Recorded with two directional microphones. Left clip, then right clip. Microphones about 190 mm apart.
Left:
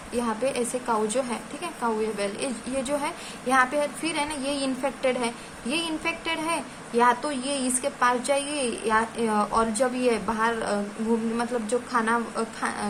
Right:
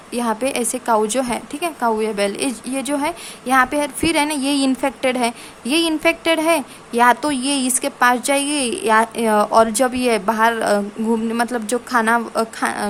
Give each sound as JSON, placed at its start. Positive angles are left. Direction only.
{"t": 0.1, "sound": "a woman's voice", "side_deg": -50}